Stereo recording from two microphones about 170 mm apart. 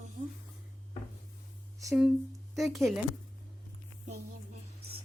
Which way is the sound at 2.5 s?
Centre (ahead or behind).